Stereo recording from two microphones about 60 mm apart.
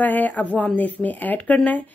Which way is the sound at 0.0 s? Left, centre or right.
Left.